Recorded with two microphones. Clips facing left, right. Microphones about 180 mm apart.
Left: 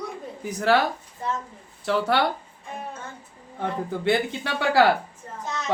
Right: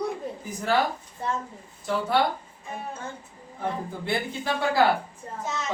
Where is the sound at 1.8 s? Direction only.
75° left (ahead or behind).